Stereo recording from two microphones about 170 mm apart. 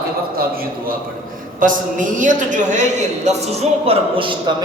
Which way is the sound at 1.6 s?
50° right (ahead or behind).